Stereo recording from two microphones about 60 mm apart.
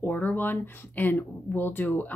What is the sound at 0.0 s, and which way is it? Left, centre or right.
A woman's voice, left.